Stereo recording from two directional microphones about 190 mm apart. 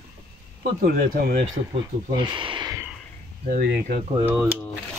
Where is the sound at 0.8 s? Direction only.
50° right (ahead or behind).